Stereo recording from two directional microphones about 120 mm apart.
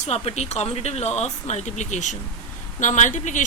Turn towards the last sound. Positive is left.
turn(degrees=90)